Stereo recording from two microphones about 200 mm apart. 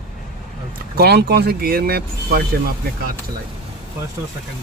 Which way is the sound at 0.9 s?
55° right (ahead or behind).